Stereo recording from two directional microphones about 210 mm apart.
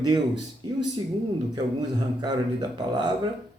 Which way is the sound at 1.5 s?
20° right (ahead or behind).